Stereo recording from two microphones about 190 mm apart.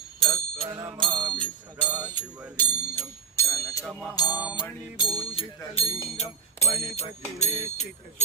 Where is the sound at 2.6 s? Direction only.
10° left (ahead or behind).